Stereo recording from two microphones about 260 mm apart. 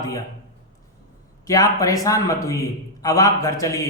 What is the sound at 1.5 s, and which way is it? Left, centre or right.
A man's voice, centre.